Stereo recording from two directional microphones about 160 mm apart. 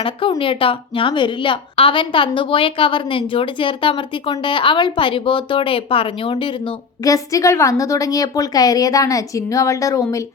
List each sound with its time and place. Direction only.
0.0 s a woman's voice: 35° left (ahead or behind)